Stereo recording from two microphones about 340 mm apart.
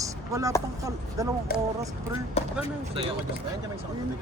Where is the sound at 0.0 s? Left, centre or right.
Centre.